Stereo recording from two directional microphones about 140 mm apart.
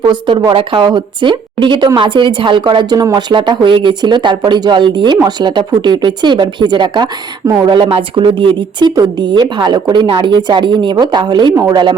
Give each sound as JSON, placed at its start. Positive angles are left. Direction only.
{"t": 0.1, "sound": "a woman's voice", "side_deg": -30}